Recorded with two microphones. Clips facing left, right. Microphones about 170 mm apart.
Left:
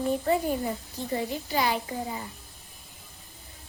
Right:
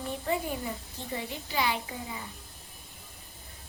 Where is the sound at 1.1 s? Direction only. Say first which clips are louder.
Left 5 dB; 40° left (ahead or behind).